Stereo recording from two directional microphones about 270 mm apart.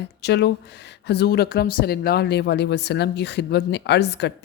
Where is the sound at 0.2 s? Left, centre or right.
Left.